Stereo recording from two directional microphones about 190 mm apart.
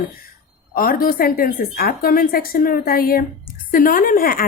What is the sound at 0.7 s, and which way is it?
Speech, 50° left (ahead or behind).